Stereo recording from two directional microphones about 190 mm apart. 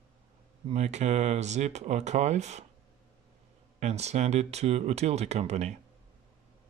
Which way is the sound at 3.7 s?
35° right (ahead or behind).